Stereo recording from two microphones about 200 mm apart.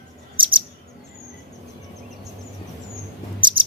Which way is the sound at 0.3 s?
25° right (ahead or behind).